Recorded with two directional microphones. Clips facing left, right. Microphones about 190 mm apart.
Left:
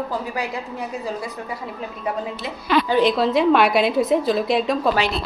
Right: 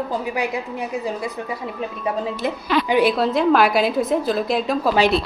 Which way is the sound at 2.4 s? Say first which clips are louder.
Right 7 dB; 55° right (ahead or behind).